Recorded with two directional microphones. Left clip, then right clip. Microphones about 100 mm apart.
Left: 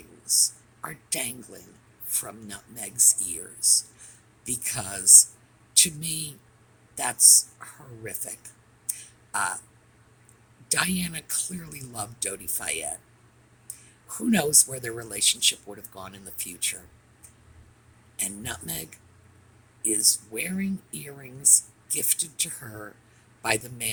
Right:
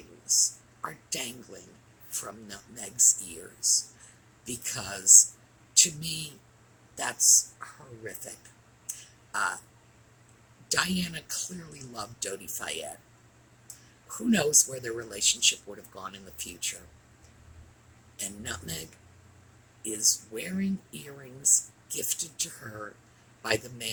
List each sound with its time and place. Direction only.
0.3 s a sound: 90° left
3.0 s speech: 90° left
8.9 s a sound: 90° left
10.7 s speech: 90° left
14.3 s speech: 90° left
18.2 s speech: 90° left